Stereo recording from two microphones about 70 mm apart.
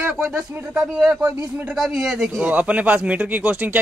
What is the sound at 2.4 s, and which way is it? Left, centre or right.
Speech, centre.